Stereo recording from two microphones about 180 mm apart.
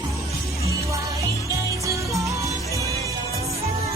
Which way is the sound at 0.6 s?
15° right (ahead or behind).